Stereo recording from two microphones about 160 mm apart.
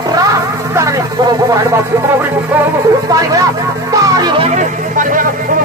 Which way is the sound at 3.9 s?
25° right (ahead or behind).